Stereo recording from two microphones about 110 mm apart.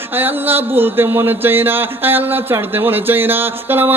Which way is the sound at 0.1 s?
20° right (ahead or behind).